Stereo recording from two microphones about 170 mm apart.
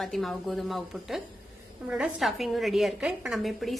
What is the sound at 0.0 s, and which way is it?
A woman's voice, centre (ahead or behind).